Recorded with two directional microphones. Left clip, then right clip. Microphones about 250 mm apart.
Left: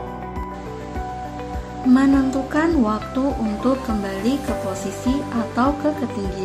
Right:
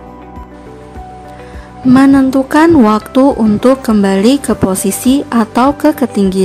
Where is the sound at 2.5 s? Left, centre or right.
Right.